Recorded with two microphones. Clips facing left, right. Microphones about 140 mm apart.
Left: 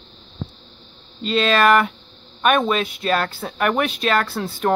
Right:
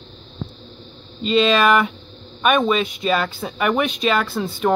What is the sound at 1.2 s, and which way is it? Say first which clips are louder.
Speech: right 2 dB; centre (ahead or behind).